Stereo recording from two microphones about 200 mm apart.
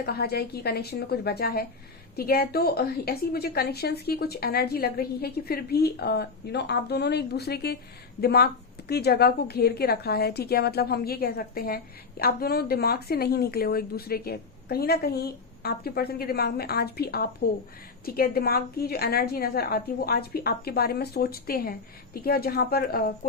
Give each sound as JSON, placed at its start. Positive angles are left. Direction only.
{"t": 0.0, "sound": "a woman's voice", "side_deg": 50}